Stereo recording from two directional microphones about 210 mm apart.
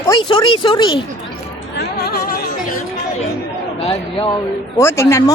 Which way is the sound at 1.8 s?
45° left (ahead or behind).